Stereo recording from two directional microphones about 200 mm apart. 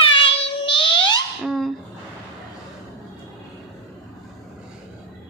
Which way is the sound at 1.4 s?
Centre (ahead or behind).